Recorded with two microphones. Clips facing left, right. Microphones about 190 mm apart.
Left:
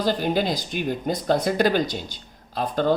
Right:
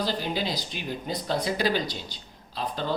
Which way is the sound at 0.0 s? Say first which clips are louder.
Left 6 dB; 50° left (ahead or behind).